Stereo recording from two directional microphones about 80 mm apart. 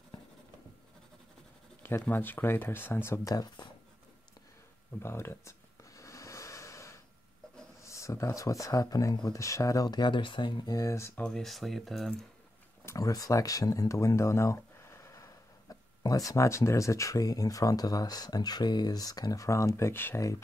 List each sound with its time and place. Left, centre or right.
1.8 s speech: left
3.3 s speech: left
5.0 s a sound: left
7.8 s speech: left
9.8 s speech: left
10.8 s speech: left
11.1 s speech: centre
12.8 s speech: left
20.2 s speech: left